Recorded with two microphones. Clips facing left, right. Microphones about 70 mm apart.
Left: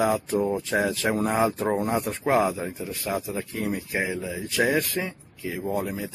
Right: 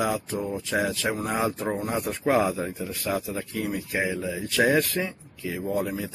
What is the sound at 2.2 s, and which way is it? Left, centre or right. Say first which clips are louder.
Speech: right 1 dB; centre.